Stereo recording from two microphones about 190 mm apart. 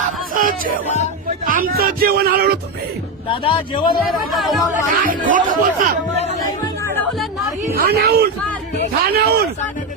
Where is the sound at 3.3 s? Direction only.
25° left (ahead or behind).